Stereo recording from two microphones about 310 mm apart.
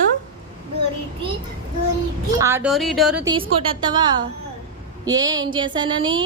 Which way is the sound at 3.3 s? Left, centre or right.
Centre.